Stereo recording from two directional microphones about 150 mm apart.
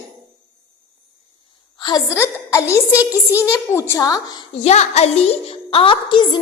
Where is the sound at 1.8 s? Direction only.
30° left (ahead or behind).